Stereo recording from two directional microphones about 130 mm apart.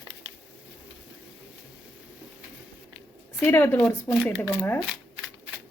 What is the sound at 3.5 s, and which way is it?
Speech, 15° left (ahead or behind).